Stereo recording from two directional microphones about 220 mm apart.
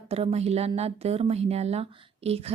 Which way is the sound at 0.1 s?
25° right (ahead or behind).